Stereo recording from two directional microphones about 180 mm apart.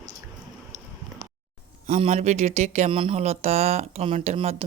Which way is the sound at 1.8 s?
35° right (ahead or behind).